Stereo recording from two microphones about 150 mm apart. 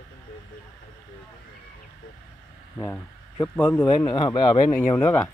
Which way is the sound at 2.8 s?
10° left (ahead or behind).